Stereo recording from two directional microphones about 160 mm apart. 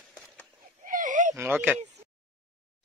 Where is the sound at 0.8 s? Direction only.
55° right (ahead or behind).